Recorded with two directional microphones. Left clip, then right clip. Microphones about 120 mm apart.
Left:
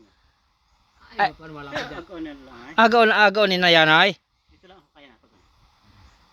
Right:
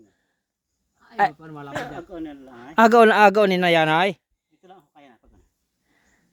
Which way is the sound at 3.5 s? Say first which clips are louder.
Left 3 dB; 25° right (ahead or behind).